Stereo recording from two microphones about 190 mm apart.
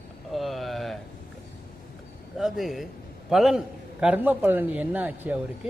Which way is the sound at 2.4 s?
Centre (ahead or behind).